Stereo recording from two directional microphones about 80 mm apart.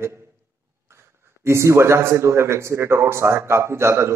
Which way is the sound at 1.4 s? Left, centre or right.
Right.